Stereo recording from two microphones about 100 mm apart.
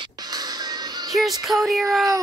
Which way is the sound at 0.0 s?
40° right (ahead or behind).